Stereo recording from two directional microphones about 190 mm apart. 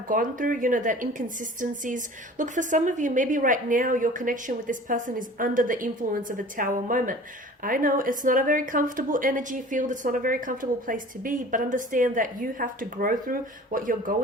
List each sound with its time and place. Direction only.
0.1 s a woman's voice: 45° right (ahead or behind)